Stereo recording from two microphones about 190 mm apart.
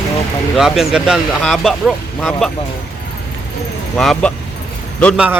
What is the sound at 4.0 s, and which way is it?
Speech, centre (ahead or behind).